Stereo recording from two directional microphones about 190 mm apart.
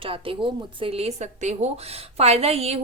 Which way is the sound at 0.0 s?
30° right (ahead or behind).